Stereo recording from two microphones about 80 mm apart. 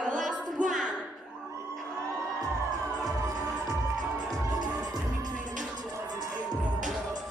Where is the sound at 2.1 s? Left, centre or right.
Right.